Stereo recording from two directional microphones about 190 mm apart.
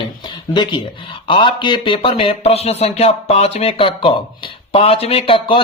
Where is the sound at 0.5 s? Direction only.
25° left (ahead or behind).